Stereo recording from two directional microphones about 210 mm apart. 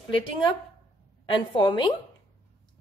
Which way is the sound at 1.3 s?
20° left (ahead or behind).